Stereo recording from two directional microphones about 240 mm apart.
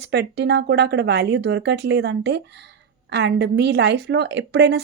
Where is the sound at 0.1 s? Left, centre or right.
Right.